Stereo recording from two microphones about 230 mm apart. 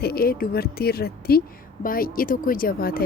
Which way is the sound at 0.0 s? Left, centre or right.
Left.